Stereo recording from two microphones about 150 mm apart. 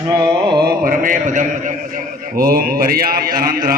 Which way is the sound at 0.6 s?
70° right (ahead or behind).